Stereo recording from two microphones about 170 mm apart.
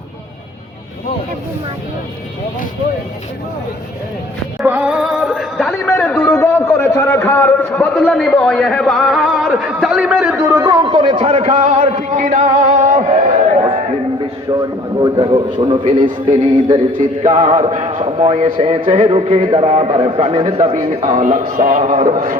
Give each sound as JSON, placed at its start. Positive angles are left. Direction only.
{"t": 4.6, "sound": "speech", "side_deg": -10}
{"t": 10.8, "sound": "a sound", "side_deg": -30}
{"t": 14.6, "sound": "a man's voice", "side_deg": -25}
{"t": 20.7, "sound": "speech", "side_deg": -45}